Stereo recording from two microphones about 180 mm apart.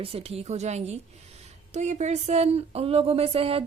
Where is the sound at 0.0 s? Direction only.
35° right (ahead or behind).